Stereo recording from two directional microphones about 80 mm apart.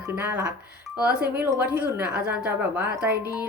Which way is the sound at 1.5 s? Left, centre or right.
Right.